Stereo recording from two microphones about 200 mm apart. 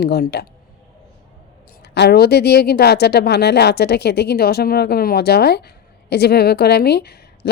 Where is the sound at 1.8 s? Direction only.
55° left (ahead or behind).